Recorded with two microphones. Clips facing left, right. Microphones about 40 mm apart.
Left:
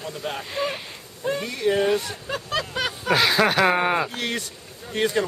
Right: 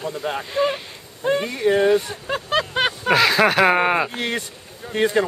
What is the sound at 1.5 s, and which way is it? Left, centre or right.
Speech, right.